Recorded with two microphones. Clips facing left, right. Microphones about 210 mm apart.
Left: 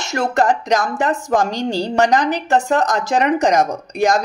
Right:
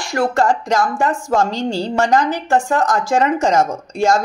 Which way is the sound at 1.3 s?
15° left (ahead or behind).